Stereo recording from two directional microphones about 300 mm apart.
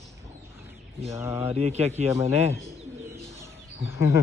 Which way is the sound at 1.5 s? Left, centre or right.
Right.